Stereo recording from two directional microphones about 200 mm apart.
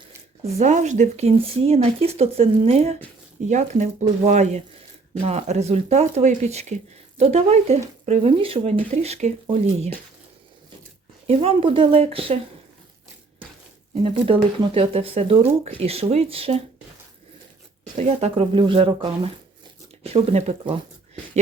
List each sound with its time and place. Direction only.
0.4 s speech: 35° right (ahead or behind)
11.3 s speech: 30° right (ahead or behind)
13.9 s speech: 30° right (ahead or behind)
17.9 s speech: 30° right (ahead or behind)